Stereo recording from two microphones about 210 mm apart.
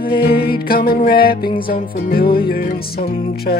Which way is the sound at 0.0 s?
45° left (ahead or behind).